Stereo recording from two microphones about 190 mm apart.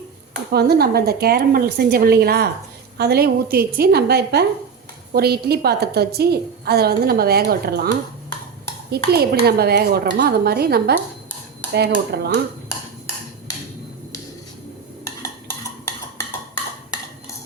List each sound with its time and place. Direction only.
0.5 s a woman's voice: 55° right (ahead or behind)